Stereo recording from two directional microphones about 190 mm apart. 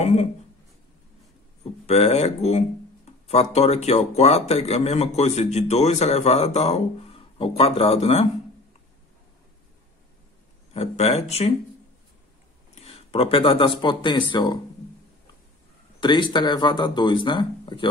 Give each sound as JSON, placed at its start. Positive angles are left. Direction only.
{"t": 0.0, "sound": "speech", "side_deg": 35}
{"t": 1.9, "sound": "speech", "side_deg": 30}
{"t": 10.7, "sound": "speech", "side_deg": 30}
{"t": 12.7, "sound": "a sound", "side_deg": 30}
{"t": 13.7, "sound": "speech", "side_deg": 25}
{"t": 16.0, "sound": "speech", "side_deg": 25}